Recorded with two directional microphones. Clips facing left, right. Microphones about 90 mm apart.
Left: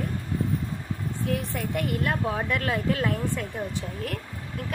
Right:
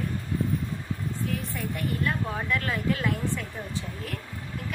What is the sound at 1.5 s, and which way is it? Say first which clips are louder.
Speech: left 3 dB; 70° left (ahead or behind).